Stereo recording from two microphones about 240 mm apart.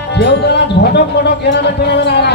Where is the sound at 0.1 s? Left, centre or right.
Left.